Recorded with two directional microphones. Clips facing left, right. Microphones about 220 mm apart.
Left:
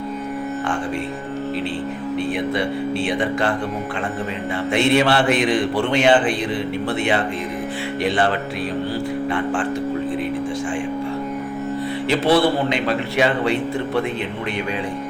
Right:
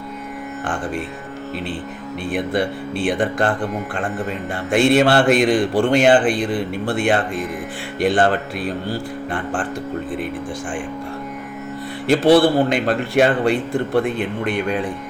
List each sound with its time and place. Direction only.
2.3 s a man's voice: 50° right (ahead or behind)
4.7 s a man's voice: 45° right (ahead or behind)
12.0 s a man's voice: 50° right (ahead or behind)